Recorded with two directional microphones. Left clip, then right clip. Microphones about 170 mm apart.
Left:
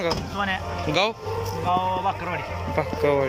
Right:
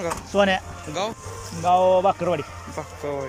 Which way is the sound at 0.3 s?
60° right (ahead or behind).